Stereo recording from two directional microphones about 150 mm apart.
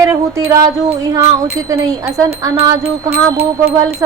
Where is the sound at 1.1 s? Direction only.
20° right (ahead or behind).